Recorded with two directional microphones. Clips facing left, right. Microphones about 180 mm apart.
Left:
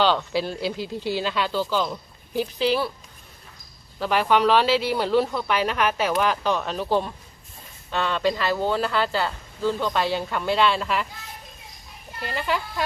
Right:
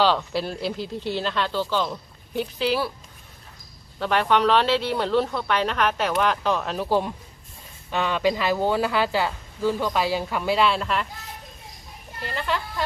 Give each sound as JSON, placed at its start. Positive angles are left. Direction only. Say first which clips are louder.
{"t": 0.0, "sound": "speech", "louder": "even", "side_deg": 0}
{"t": 4.0, "sound": "speech", "louder": "left 1 dB", "side_deg": 5}
{"t": 12.2, "sound": "speech", "louder": "left 1 dB", "side_deg": 10}